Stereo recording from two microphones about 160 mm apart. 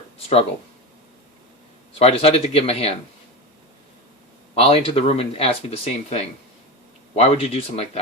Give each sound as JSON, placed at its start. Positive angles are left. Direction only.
{"t": 2.0, "sound": "speech", "side_deg": 40}
{"t": 4.5, "sound": "speech", "side_deg": 35}